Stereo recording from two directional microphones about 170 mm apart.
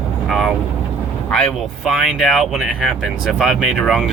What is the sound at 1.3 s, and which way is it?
Speech, 5° left (ahead or behind).